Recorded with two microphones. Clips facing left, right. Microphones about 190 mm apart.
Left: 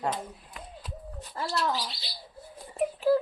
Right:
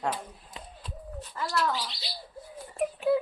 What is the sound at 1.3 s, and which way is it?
Speech, 30° left (ahead or behind).